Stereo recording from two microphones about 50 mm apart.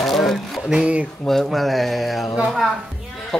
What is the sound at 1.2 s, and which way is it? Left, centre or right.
Speech, centre.